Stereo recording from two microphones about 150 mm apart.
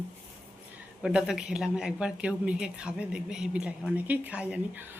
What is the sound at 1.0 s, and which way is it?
Speech, 5° right (ahead or behind).